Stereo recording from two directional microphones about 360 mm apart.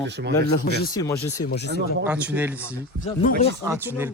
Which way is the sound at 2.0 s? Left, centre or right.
Centre.